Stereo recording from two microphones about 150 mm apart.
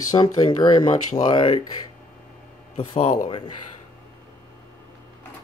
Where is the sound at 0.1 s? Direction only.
25° left (ahead or behind).